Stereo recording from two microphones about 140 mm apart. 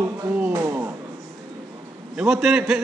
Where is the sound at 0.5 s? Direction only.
20° right (ahead or behind).